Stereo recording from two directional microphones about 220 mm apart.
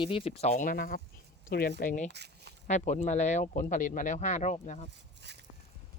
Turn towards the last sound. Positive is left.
turn(degrees=-50)  # may be behind; listen again after turning